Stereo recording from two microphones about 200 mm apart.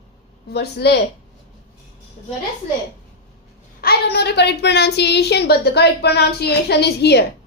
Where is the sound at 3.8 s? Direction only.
55° left (ahead or behind).